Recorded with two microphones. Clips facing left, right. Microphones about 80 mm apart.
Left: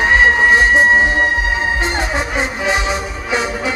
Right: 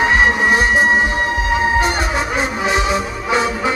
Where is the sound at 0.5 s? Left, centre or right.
Left.